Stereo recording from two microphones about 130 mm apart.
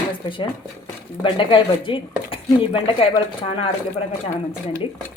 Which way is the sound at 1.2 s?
40° left (ahead or behind).